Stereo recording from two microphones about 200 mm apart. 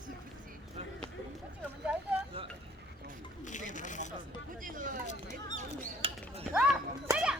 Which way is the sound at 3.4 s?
40° left (ahead or behind).